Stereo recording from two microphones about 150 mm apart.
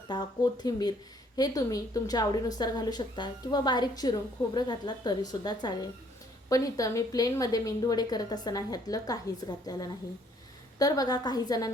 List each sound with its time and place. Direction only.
0.1 s a woman's voice: 30° left (ahead or behind)